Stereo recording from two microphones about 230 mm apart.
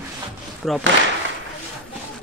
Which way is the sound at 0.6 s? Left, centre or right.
Centre.